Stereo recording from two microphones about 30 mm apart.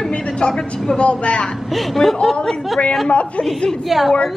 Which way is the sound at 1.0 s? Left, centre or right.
Left.